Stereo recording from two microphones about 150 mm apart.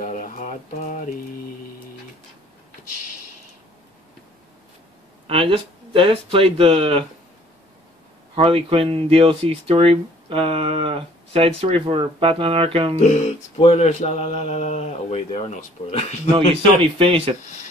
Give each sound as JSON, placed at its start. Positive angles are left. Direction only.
{"t": 0.0, "sound": "a sound", "side_deg": 60}
{"t": 5.2, "sound": "speech", "side_deg": -40}
{"t": 8.4, "sound": "speech", "side_deg": -40}
{"t": 13.0, "sound": "speech", "side_deg": 50}
{"t": 16.8, "sound": "speech", "side_deg": -40}